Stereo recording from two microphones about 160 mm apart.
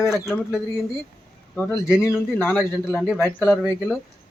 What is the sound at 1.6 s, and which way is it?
Speech, 10° left (ahead or behind).